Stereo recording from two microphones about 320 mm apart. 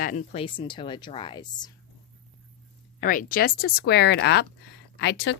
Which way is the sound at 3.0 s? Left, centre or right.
Left.